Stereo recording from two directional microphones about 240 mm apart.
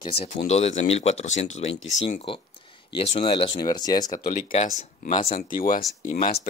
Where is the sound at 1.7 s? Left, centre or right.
Left.